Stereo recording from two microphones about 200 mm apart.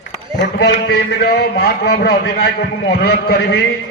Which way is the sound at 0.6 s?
55° left (ahead or behind).